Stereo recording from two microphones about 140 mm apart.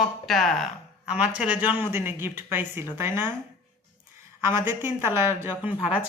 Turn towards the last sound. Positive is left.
turn(degrees=-10)  # may be behind; listen again after turning